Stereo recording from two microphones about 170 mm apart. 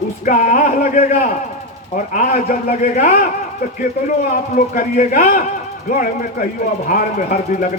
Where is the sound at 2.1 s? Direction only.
50° left (ahead or behind).